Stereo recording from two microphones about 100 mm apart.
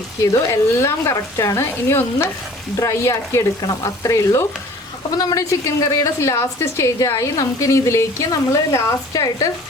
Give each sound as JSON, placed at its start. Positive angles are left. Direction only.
{"t": 0.2, "sound": "a woman's voice", "side_deg": 30}